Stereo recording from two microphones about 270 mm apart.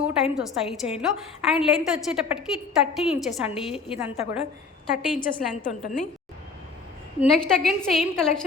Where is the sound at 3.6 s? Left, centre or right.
Left.